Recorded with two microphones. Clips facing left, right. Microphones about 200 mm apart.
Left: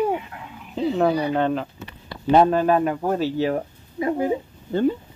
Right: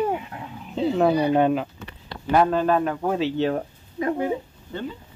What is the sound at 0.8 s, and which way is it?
Speech, 5° right (ahead or behind).